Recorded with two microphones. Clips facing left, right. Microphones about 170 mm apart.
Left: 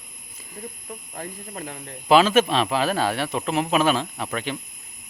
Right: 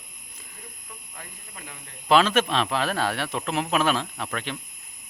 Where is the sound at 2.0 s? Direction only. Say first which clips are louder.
Left 3 dB; 5° left (ahead or behind).